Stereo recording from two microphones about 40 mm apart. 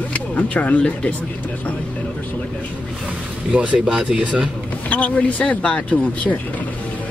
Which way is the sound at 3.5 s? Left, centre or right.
Right.